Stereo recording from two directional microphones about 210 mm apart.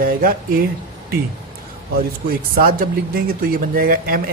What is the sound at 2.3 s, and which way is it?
Speech, 45° right (ahead or behind).